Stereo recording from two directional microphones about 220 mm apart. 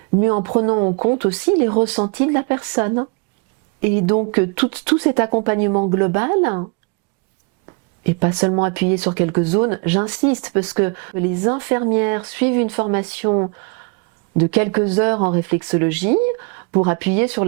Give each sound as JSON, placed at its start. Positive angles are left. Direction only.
{"t": 0.2, "sound": "speech", "side_deg": -15}
{"t": 4.3, "sound": "speech", "side_deg": -10}
{"t": 8.2, "sound": "speech", "side_deg": -20}